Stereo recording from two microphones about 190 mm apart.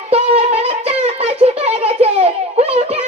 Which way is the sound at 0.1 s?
30° right (ahead or behind).